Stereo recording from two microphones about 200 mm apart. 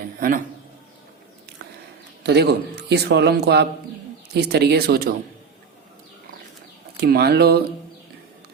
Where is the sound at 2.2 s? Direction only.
55° right (ahead or behind).